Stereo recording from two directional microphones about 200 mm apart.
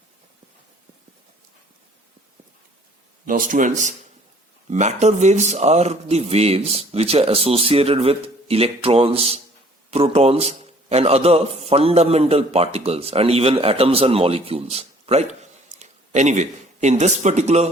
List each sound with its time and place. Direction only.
3.2 s a man's voice: 45° right (ahead or behind)